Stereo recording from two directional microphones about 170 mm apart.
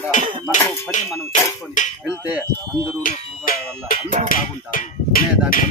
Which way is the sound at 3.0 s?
55° left (ahead or behind).